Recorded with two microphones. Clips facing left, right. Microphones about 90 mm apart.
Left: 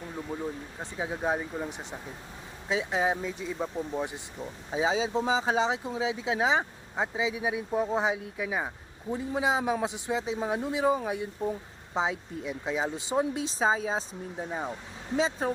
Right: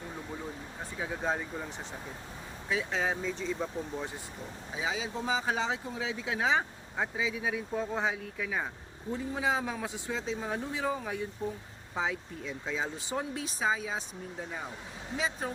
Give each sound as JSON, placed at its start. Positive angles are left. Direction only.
{"t": 0.8, "sound": "speech", "side_deg": 20}
{"t": 4.7, "sound": "speech", "side_deg": 25}